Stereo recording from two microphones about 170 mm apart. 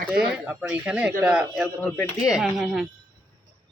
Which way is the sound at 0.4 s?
5° right (ahead or behind).